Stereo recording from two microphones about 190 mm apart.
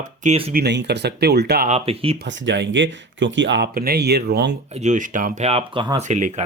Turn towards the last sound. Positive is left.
turn(degrees=-40)  # may be behind; listen again after turning